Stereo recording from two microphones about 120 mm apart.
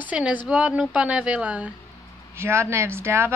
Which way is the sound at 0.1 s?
10° right (ahead or behind).